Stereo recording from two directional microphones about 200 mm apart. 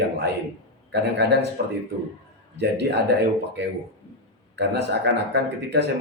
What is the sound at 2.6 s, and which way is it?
Speech, 60° right (ahead or behind).